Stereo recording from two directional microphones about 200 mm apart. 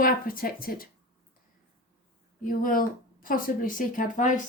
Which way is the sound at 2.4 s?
40° left (ahead or behind).